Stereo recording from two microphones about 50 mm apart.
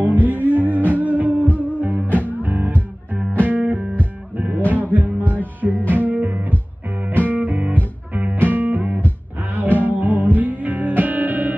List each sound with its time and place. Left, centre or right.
0.0 s music: right
4.6 s music: left
4.8 s music: right
5.2 s music: left
5.6 s music: right